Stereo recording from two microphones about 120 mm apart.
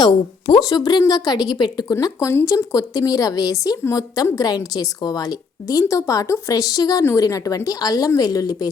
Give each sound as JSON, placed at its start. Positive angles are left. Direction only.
{"t": 0.0, "sound": "a woman's voice", "side_deg": 40}